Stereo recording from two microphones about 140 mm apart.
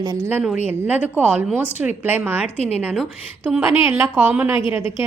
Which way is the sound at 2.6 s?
50° left (ahead or behind).